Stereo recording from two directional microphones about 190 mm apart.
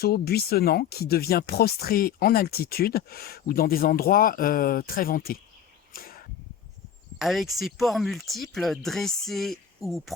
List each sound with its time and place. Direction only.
0.0 s speech: 55° left (ahead or behind)
5.9 s a sound: 50° left (ahead or behind)
7.2 s speech: centre (ahead or behind)